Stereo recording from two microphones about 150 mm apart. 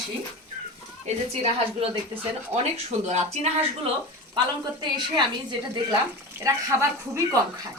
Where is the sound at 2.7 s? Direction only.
45° right (ahead or behind).